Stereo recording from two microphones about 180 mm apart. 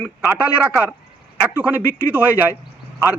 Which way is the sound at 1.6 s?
10° right (ahead or behind).